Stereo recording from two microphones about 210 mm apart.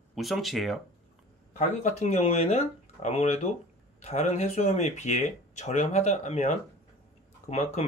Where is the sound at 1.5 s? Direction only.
35° left (ahead or behind).